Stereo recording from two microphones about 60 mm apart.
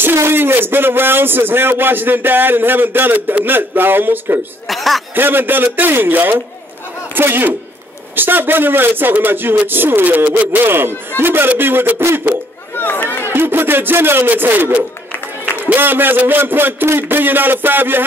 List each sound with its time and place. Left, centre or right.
0.0 s speech: right
4.6 s speech: centre
5.1 s speech: right
10.7 s speech: right
12.7 s chatter: left
13.3 s speech: right